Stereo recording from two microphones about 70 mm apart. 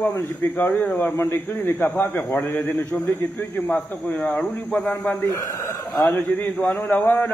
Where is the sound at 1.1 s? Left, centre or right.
Left.